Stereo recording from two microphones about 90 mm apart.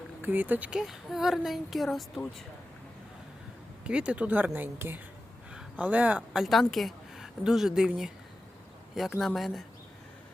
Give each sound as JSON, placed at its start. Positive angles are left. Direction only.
{"t": 0.2, "sound": "speech", "side_deg": -20}
{"t": 0.7, "sound": "a woman's voice", "side_deg": -5}
{"t": 3.8, "sound": "speech", "side_deg": -10}
{"t": 6.3, "sound": "a woman's voice", "side_deg": 0}